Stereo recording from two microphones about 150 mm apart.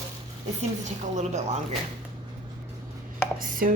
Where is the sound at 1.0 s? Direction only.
50° right (ahead or behind).